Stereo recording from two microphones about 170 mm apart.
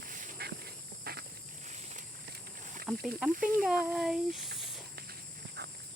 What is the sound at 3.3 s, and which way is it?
Speech, 55° right (ahead or behind).